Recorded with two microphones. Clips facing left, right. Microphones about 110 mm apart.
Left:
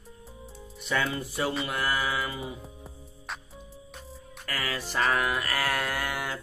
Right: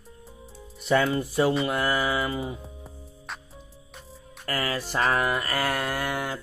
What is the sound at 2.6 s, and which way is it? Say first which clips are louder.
Music: right 2 dB; centre (ahead or behind).